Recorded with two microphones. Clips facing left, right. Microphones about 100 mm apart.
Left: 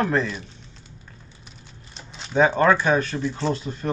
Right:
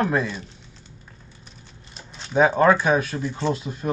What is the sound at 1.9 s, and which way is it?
Speech, centre (ahead or behind).